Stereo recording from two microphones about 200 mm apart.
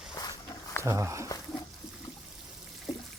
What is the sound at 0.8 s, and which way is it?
Speech, 15° right (ahead or behind).